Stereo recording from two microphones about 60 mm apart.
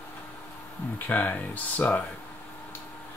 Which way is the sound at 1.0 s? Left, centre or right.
Left.